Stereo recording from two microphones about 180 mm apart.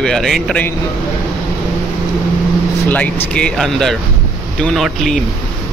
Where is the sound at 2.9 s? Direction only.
10° left (ahead or behind).